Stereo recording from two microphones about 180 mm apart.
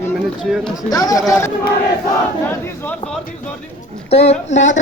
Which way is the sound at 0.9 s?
20° left (ahead or behind).